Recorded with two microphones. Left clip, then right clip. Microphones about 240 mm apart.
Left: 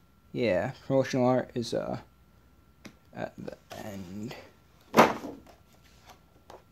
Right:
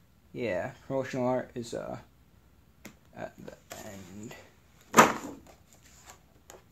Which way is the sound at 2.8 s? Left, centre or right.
Centre.